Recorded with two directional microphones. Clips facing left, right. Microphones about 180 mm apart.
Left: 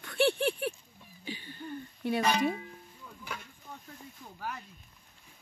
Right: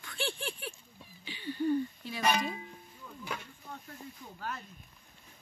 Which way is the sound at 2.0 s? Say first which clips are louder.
Left 11 dB; 60° left (ahead or behind).